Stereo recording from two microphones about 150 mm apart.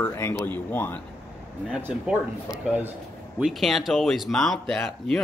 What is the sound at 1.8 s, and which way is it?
A man's voice, 15° right (ahead or behind).